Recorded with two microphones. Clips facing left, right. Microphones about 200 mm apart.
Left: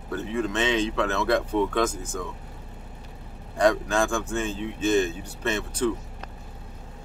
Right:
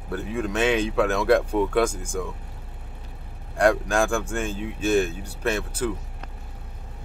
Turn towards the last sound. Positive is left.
turn(degrees=-5)  # may be behind; listen again after turning